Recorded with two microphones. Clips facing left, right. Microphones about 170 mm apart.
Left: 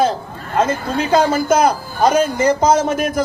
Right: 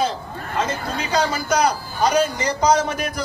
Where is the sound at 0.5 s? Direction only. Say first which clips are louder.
Left 7 dB; 50° left (ahead or behind).